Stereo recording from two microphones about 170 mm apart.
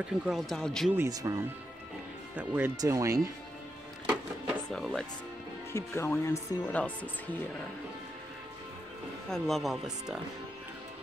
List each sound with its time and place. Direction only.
0.0 s a man's voice: 5° right (ahead or behind)
0.9 s speech: 20° right (ahead or behind)
4.6 s speech: 5° left (ahead or behind)
5.7 s speech: 15° left (ahead or behind)
9.3 s a man's voice: centre (ahead or behind)